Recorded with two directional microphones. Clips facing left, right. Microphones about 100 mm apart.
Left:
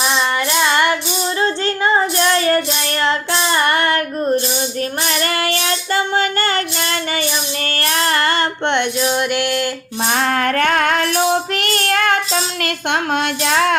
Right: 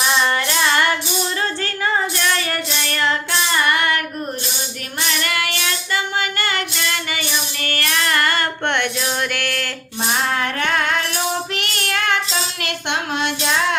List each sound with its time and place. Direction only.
0.6 s music: 20° left (ahead or behind)
1.4 s child singing: 25° left (ahead or behind)
5.0 s child singing: 35° left (ahead or behind); by 9.6 s 20° left (ahead or behind)
10.1 s child singing: 50° left (ahead or behind)